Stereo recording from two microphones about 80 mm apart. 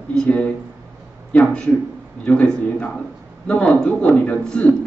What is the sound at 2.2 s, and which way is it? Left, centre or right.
A man's voice, centre.